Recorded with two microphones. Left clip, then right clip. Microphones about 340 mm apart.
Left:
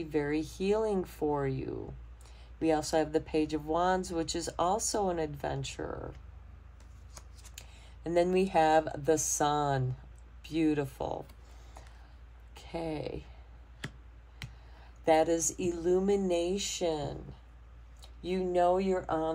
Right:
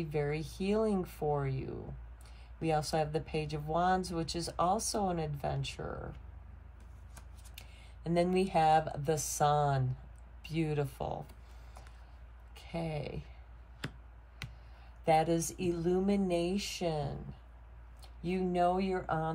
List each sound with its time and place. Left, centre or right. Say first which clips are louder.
0.0 s speech: left 3 dB; left
7.2 s speech: left 3 dB; left
12.5 s speech: left 3 dB; left
15.0 s speech: left 3 dB; left